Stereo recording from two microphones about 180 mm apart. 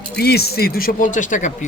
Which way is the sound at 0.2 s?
60° left (ahead or behind).